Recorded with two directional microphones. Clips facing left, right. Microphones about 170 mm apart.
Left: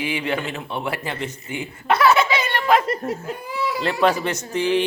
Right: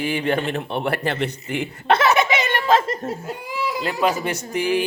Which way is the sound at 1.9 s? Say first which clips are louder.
Even; 20° right (ahead or behind).